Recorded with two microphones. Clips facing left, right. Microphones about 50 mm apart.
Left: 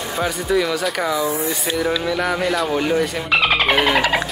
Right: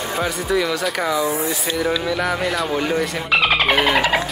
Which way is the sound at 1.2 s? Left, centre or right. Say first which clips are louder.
Even; right.